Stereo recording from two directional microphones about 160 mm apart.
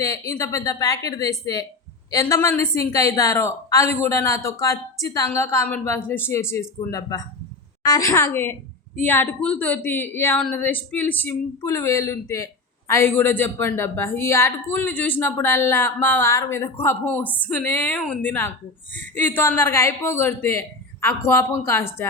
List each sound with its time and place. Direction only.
0.0 s a woman's voice: 20° left (ahead or behind)